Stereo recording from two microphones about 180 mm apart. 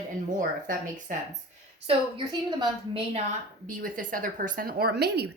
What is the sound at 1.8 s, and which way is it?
A woman's voice, 30° right (ahead or behind).